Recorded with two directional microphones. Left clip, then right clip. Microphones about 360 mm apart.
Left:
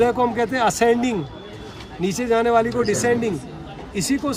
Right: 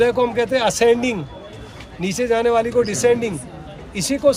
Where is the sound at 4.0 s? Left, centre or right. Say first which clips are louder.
Right 7 dB; centre.